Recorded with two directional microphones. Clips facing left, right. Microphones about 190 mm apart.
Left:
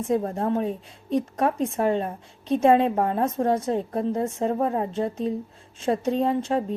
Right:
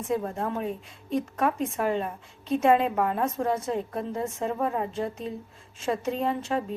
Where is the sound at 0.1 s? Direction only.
35° left (ahead or behind).